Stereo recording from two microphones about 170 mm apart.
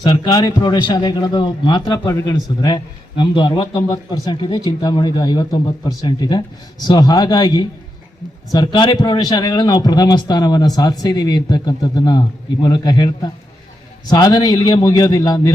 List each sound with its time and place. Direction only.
0.0 s a man's voice: 25° left (ahead or behind)